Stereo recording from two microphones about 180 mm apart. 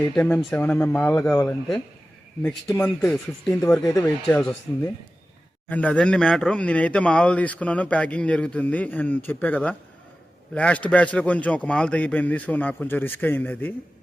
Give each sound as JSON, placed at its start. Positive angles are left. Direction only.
{"t": 0.2, "sound": "speech", "side_deg": 5}
{"t": 5.6, "sound": "speech", "side_deg": 10}